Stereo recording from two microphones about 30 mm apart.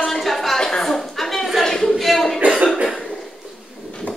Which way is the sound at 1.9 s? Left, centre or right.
Centre.